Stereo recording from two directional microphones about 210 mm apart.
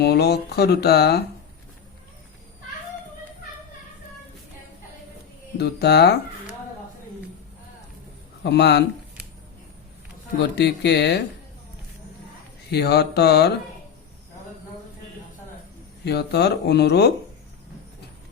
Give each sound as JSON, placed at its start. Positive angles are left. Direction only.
{"t": 0.0, "sound": "speech", "side_deg": 50}
{"t": 5.5, "sound": "speech", "side_deg": 50}
{"t": 8.4, "sound": "speech", "side_deg": 55}
{"t": 10.5, "sound": "speech", "side_deg": 55}
{"t": 12.7, "sound": "speech", "side_deg": 50}
{"t": 16.0, "sound": "speech", "side_deg": 50}